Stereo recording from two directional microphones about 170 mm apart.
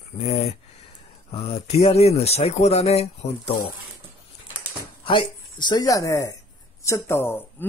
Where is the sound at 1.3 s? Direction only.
35° left (ahead or behind).